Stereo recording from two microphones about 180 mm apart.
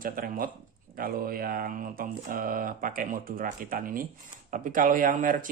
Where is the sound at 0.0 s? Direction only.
50° right (ahead or behind).